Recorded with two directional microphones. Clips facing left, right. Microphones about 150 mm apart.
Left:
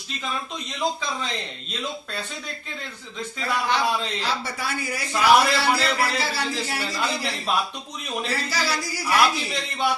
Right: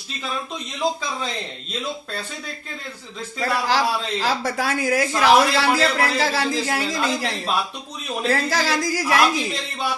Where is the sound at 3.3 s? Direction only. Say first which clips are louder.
Right 3 dB; 85° right.